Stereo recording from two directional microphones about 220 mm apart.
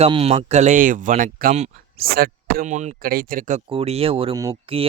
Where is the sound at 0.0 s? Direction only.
25° right (ahead or behind).